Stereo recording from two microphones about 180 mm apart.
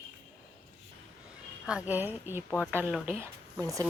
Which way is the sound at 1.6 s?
5° right (ahead or behind).